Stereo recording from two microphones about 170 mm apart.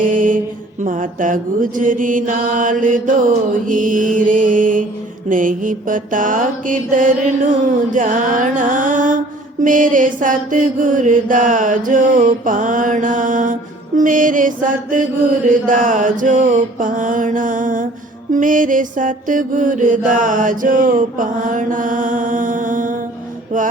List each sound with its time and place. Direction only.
0.0 s mantra: 50° right (ahead or behind)